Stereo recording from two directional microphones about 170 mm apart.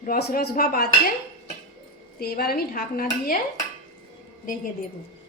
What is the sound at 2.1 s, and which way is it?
Dishes, 65° left (ahead or behind).